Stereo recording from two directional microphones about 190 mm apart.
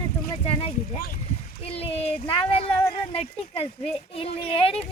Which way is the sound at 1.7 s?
30° left (ahead or behind).